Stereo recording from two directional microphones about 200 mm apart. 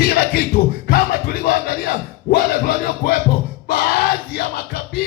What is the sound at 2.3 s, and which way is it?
Music, 45° left (ahead or behind).